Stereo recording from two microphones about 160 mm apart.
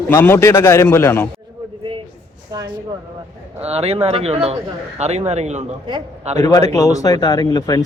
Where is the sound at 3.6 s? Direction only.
40° right (ahead or behind).